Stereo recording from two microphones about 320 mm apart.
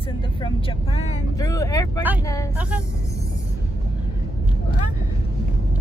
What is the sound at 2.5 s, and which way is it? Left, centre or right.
Speech, centre.